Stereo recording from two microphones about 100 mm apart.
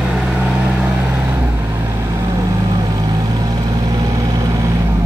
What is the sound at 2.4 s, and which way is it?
Vehicle, 40° right (ahead or behind).